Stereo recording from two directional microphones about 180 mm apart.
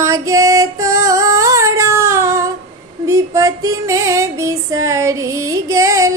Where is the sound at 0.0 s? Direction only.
15° right (ahead or behind).